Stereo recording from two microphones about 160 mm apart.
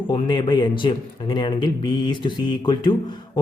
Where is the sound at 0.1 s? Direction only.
30° left (ahead or behind).